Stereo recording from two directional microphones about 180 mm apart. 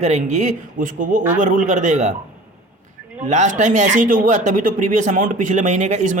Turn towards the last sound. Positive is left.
turn(degrees=-45)  # may be behind; listen again after turning